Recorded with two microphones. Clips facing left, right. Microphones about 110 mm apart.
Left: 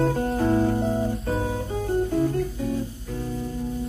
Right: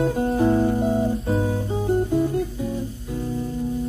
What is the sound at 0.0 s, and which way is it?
Music, 15° right (ahead or behind).